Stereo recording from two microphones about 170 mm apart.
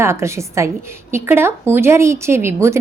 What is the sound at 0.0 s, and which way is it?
A woman's voice, 15° right (ahead or behind).